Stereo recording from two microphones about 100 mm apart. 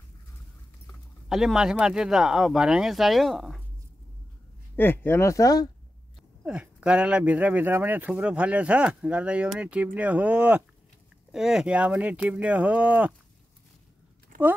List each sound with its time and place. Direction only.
1.3 s speech: 5° right (ahead or behind)
4.7 s speech: 20° left (ahead or behind)
6.4 s speech: 10° right (ahead or behind)